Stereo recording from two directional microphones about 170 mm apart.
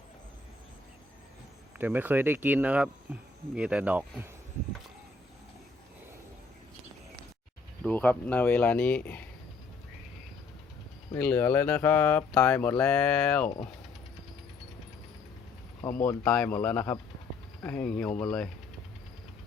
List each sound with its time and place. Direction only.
1.8 s speech: 10° right (ahead or behind)
7.9 s speech: 10° left (ahead or behind)
11.2 s speech: 10° left (ahead or behind)
15.9 s speech: 20° left (ahead or behind)
16.2 s speech: 5° left (ahead or behind)